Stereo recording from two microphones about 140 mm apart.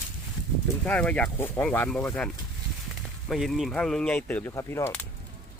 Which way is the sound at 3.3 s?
Centre (ahead or behind).